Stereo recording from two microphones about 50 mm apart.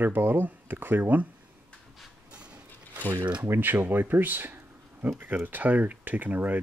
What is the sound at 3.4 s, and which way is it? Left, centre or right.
Speech, right.